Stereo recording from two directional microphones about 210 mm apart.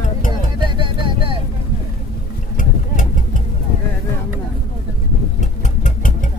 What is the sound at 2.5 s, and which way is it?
Vehicle, 40° left (ahead or behind).